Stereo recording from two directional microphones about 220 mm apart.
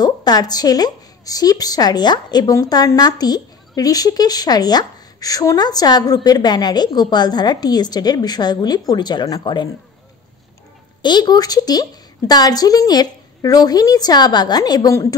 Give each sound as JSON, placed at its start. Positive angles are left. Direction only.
{"t": 0.0, "sound": "a woman's voice", "side_deg": 20}
{"t": 11.0, "sound": "a woman's voice", "side_deg": 20}